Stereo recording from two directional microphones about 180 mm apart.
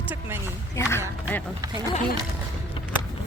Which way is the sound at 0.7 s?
15° left (ahead or behind).